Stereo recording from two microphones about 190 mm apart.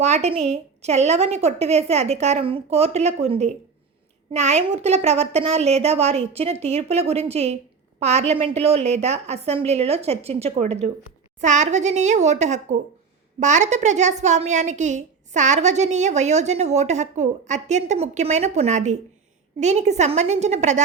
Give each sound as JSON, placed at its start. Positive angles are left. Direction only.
{"t": 0.0, "sound": "a woman's voice", "side_deg": -35}